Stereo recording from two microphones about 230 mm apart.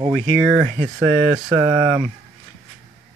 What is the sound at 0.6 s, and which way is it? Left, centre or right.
Speech, right.